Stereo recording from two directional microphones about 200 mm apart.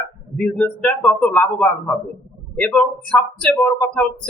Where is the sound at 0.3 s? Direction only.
5° left (ahead or behind).